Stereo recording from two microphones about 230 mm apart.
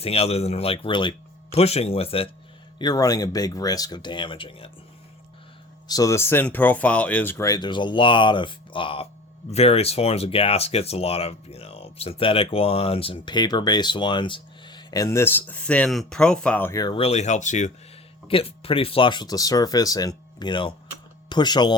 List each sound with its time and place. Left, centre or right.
0.0 s speech: left
5.9 s speech: centre